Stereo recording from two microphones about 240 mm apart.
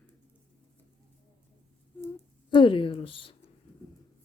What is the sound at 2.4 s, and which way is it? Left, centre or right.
Speech, left.